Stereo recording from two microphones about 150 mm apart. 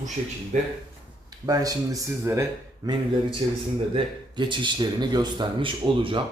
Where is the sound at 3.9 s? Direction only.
30° right (ahead or behind).